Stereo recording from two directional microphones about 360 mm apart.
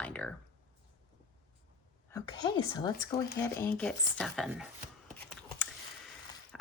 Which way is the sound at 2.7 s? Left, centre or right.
Centre.